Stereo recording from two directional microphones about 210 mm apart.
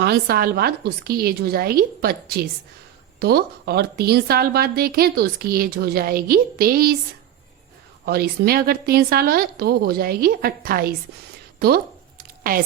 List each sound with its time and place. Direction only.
0.0 s a woman's voice: 50° right (ahead or behind)
8.0 s a woman's voice: 50° right (ahead or behind)
12.4 s a sound: 45° right (ahead or behind)